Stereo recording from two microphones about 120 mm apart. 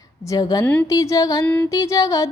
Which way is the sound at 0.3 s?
30° left (ahead or behind).